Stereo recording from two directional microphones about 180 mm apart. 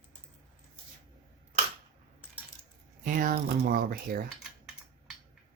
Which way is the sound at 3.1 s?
50° right (ahead or behind).